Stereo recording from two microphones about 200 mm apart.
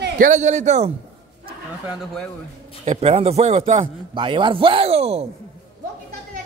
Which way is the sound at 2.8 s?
30° right (ahead or behind).